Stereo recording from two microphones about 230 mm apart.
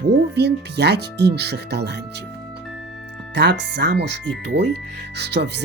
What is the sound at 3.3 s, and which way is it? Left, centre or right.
Speech, right.